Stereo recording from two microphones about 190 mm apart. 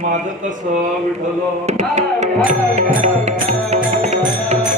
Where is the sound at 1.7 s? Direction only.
35° right (ahead or behind).